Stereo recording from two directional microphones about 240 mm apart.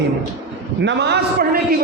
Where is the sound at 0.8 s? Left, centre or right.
Right.